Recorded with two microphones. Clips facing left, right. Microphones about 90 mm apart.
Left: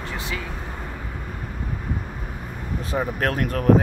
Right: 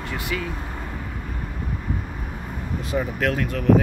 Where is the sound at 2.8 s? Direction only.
35° left (ahead or behind).